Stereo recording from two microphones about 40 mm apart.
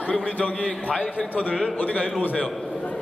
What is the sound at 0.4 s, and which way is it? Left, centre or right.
Speech, left.